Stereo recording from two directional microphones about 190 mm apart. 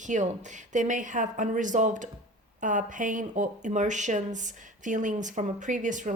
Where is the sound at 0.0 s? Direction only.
40° right (ahead or behind).